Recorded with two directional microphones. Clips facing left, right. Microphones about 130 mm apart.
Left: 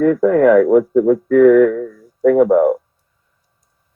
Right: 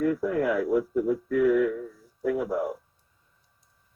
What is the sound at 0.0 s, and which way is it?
Speech, 55° left (ahead or behind).